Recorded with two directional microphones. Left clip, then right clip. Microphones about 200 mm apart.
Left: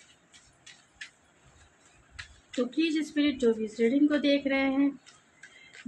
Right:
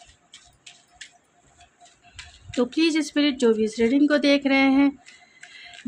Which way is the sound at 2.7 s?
55° right (ahead or behind).